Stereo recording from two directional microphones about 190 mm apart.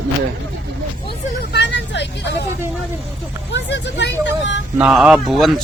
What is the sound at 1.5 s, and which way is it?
Vehicle, 65° left (ahead or behind).